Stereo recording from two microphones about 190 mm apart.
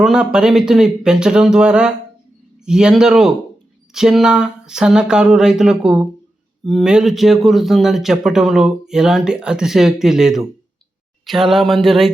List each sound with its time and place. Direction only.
0.0 s speech: 5° right (ahead or behind)